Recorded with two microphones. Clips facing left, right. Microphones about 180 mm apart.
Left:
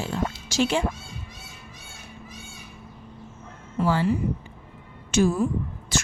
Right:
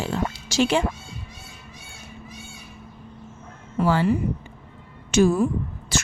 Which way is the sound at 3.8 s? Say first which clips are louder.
Right 2 dB; 65° right (ahead or behind).